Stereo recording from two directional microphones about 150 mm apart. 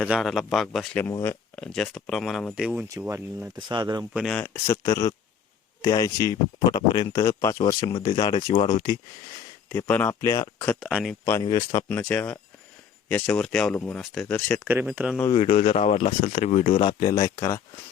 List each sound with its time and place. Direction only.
0.1 s speech: centre (ahead or behind)
1.2 s speech: 15° left (ahead or behind)
1.6 s speech: 5° left (ahead or behind); by 3.5 s 15° right (ahead or behind)
3.7 s speech: 30° right (ahead or behind)
4.3 s speech: 10° left (ahead or behind)
4.6 s speech: 20° left (ahead or behind)
9.6 s speech: 10° left (ahead or behind)
10.8 s speech: centre (ahead or behind)
11.9 s speech: 10° left (ahead or behind)
14.6 s speech: 10° right (ahead or behind)
15.3 s speech: 40° left (ahead or behind)
16.8 s speech: 30° left (ahead or behind)
17.2 s speech: 20° left (ahead or behind)